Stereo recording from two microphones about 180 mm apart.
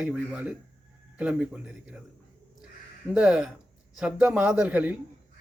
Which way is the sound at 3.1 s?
5° right (ahead or behind).